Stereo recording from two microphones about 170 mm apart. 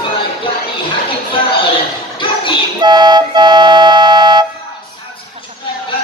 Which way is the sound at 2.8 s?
25° right (ahead or behind).